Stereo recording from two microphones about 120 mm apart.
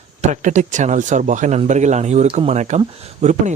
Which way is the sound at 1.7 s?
75° right (ahead or behind).